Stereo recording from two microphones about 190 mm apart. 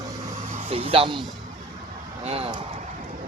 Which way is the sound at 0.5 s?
30° right (ahead or behind).